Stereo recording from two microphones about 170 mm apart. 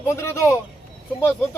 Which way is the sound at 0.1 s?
15° left (ahead or behind).